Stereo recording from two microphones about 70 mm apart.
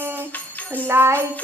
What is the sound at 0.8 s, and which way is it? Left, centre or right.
Music, right.